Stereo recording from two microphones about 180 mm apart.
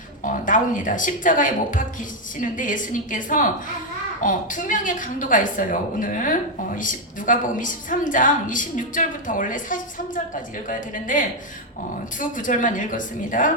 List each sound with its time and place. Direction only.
0.2 s a woman's voice: 45° left (ahead or behind)